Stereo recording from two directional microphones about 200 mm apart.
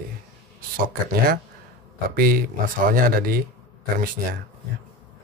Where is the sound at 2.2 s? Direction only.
45° right (ahead or behind).